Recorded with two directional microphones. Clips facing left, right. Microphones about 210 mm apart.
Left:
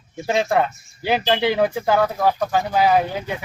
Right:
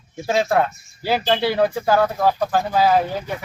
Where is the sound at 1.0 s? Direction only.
15° left (ahead or behind).